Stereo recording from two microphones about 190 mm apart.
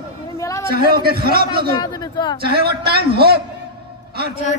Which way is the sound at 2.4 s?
55° right (ahead or behind).